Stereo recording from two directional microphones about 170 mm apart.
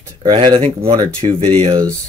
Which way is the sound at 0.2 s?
30° right (ahead or behind).